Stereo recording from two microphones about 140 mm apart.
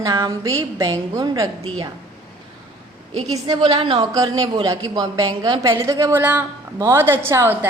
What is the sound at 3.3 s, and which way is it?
Speech, 30° right (ahead or behind).